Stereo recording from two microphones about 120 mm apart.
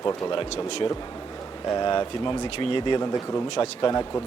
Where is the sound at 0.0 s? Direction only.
40° left (ahead or behind).